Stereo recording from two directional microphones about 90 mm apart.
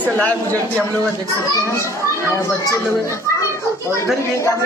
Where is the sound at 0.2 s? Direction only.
15° left (ahead or behind).